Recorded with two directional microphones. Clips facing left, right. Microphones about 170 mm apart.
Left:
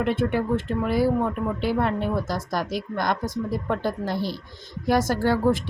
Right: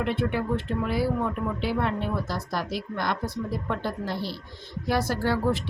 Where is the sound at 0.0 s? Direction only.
45° left (ahead or behind).